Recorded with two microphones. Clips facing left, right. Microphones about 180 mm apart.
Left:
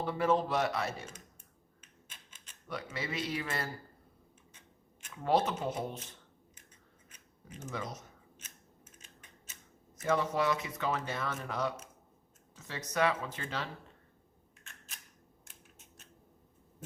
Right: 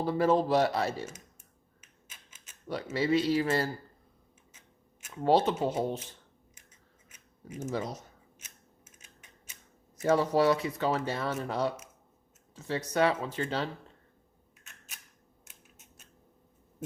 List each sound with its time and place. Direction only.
0.0 s speech: 35° right (ahead or behind)
1.8 s typewriter: 5° right (ahead or behind)
2.9 s speech: 30° right (ahead or behind)
5.1 s speech: 30° right (ahead or behind)
7.1 s a sound: 10° right (ahead or behind)
7.7 s speech: 30° right (ahead or behind)
8.4 s scissors: 10° right (ahead or behind)
10.0 s speech: 30° right (ahead or behind)